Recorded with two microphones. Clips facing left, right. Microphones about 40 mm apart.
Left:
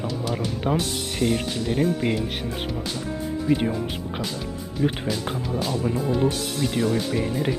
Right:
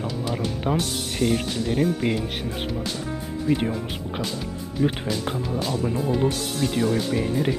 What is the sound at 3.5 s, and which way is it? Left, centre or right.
Speech, centre.